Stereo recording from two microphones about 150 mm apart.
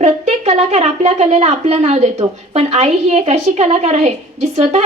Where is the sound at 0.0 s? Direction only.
45° right (ahead or behind).